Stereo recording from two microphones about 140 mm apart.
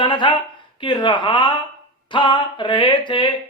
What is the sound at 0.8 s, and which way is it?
Speech, 35° left (ahead or behind).